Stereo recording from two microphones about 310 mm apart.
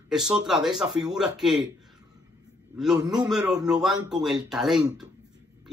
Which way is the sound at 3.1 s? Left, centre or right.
Centre.